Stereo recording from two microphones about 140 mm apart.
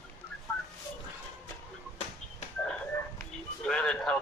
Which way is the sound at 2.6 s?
10° left (ahead or behind).